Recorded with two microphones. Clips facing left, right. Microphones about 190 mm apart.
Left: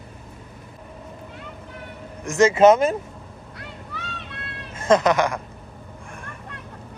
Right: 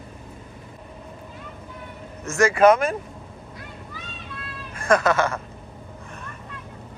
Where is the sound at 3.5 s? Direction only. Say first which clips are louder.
Left 4 dB; 65° left (ahead or behind).